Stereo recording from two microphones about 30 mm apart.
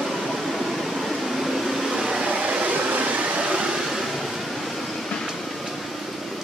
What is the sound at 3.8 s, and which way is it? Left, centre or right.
Waves, centre.